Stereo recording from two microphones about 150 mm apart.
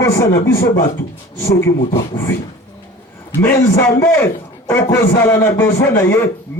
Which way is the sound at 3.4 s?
15° left (ahead or behind).